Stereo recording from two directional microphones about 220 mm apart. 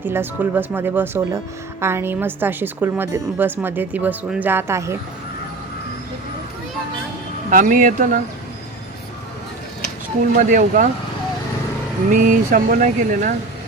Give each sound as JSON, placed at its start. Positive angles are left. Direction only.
{"t": 0.0, "sound": "a woman's voice", "side_deg": -10}
{"t": 7.5, "sound": "speech", "side_deg": -35}
{"t": 10.3, "sound": "speech", "side_deg": -35}
{"t": 12.1, "sound": "speech", "side_deg": -35}